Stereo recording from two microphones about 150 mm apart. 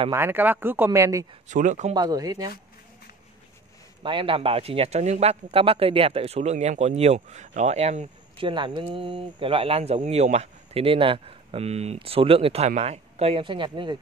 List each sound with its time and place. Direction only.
0.1 s speech: 15° right (ahead or behind)
1.5 s speech: 55° right (ahead or behind)
2.0 s speech: 25° right (ahead or behind)
4.0 s speech: 35° right (ahead or behind)
8.4 s speech: 35° right (ahead or behind)